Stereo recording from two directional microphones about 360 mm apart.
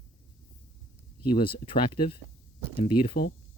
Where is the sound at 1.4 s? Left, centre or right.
Centre.